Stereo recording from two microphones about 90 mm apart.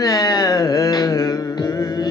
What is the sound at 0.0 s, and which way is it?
Carnatic music, 40° left (ahead or behind).